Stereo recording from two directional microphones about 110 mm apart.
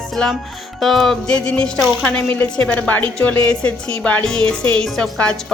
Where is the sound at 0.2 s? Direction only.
10° left (ahead or behind).